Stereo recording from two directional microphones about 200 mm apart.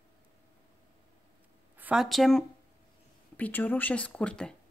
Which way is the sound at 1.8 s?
5° right (ahead or behind).